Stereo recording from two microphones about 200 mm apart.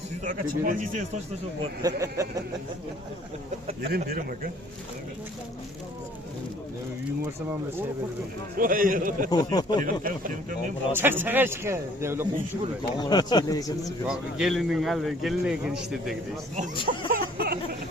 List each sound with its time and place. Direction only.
0.3 s speech: 40° right (ahead or behind)
1.8 s a man's voice: 15° right (ahead or behind)
3.8 s a man's voice: 50° right (ahead or behind)
8.5 s a man's voice: 45° right (ahead or behind)
9.3 s speech: 20° left (ahead or behind)
9.8 s a man's voice: 45° right (ahead or behind)
10.9 s a man's voice: 10° right (ahead or behind)
13.0 s speech: 20° left (ahead or behind)
14.0 s speech: 5° right (ahead or behind)
17.1 s a sound: 45° right (ahead or behind)